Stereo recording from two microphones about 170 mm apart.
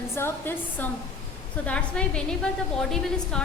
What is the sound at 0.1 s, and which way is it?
A woman's voice, 15° left (ahead or behind).